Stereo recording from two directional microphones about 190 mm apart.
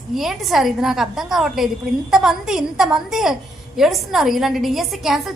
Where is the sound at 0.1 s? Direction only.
Centre (ahead or behind).